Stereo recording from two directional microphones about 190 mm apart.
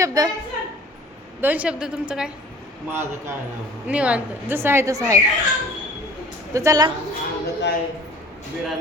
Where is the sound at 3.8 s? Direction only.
5° right (ahead or behind).